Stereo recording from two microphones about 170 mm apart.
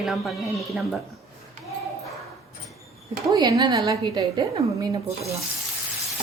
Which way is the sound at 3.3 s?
20° right (ahead or behind).